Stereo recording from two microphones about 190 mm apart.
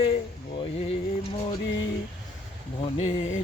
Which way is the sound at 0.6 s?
30° left (ahead or behind).